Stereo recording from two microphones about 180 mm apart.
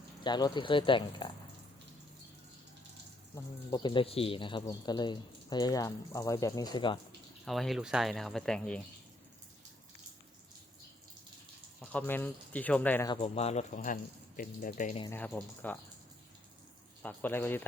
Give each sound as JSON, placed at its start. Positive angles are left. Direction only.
{"t": 0.2, "sound": "speech", "side_deg": 25}
{"t": 3.3, "sound": "speech", "side_deg": 20}
{"t": 7.4, "sound": "speech", "side_deg": 0}
{"t": 11.8, "sound": "speech", "side_deg": 10}
{"t": 13.1, "sound": "speech", "side_deg": 35}
{"t": 15.3, "sound": "speech", "side_deg": 5}
{"t": 17.0, "sound": "speech", "side_deg": 10}